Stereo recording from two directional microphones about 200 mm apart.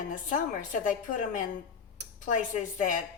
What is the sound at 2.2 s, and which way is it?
Speech, 40° left (ahead or behind).